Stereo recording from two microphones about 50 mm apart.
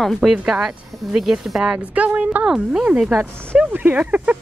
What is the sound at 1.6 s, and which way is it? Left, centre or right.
Speech, right.